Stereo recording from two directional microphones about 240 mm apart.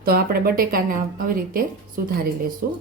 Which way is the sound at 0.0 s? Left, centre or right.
Right.